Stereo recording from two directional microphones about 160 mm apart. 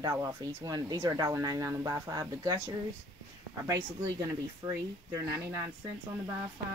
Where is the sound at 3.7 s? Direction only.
20° right (ahead or behind).